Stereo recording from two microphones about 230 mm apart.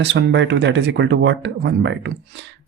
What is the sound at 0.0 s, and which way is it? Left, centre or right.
Speech, right.